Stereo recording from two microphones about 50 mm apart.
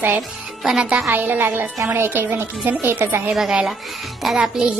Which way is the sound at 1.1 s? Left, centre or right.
Right.